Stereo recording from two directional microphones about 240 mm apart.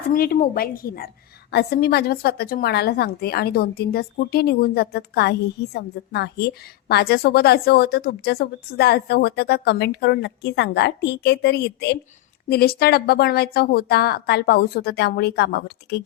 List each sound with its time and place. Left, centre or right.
0.1 s a woman's voice: left